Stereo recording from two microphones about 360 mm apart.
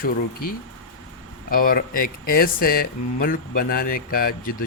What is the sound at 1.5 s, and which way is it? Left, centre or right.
Speech, left.